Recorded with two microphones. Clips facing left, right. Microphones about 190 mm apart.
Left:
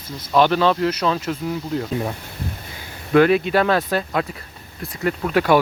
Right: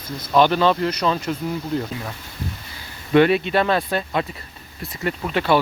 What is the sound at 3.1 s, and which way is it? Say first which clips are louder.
Speech: left 1 dB; centre (ahead or behind).